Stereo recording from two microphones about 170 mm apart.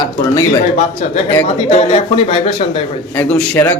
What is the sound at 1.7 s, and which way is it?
Speech, 35° left (ahead or behind).